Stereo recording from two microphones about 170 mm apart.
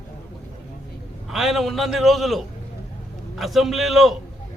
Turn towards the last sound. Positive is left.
turn(degrees=0)  # may be behind; listen again after turning